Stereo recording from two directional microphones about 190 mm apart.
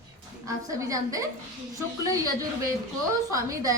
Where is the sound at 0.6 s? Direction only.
15° right (ahead or behind).